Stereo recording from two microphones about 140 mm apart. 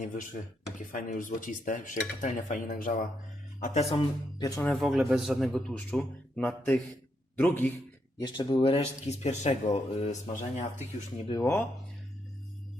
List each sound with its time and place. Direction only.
0.0 s cutlery: 70° left (ahead or behind)
3.6 s speech: 50° left (ahead or behind)
3.9 s speech: 25° left (ahead or behind)
4.6 s a man's voice: 5° left (ahead or behind)
8.2 s speech: 35° left (ahead or behind)
9.0 s speech: 50° left (ahead or behind)
11.3 s speech: 25° left (ahead or behind)